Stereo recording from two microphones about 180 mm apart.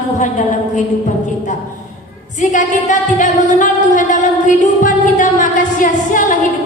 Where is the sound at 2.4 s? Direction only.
45° left (ahead or behind).